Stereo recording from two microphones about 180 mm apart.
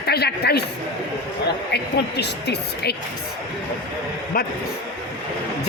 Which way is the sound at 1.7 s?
70° left (ahead or behind).